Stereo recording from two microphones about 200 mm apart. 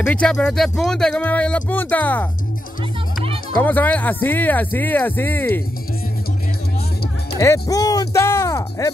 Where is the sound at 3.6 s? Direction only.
10° left (ahead or behind).